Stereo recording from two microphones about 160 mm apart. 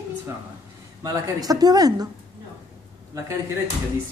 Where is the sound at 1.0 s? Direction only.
25° right (ahead or behind).